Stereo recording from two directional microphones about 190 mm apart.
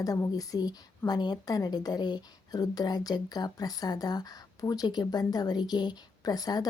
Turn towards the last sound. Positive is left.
turn(degrees=20)  # may be behind; listen again after turning